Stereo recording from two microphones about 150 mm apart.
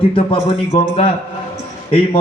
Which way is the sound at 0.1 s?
40° left (ahead or behind).